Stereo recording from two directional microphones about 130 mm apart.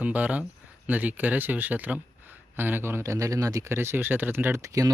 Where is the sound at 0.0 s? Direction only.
10° right (ahead or behind).